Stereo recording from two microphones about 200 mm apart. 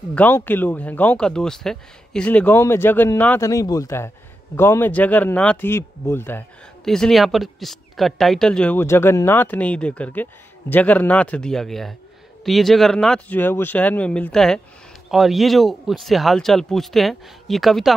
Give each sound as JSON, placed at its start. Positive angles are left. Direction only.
{"t": 0.1, "sound": "speech", "side_deg": 10}